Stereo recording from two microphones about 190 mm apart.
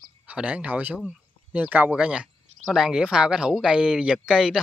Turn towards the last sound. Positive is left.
turn(degrees=-5)  # may be behind; listen again after turning